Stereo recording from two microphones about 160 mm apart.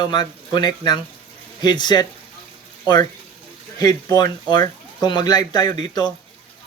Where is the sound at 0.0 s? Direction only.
25° left (ahead or behind).